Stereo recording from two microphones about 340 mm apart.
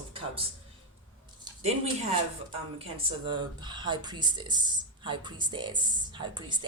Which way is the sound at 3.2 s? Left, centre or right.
Centre.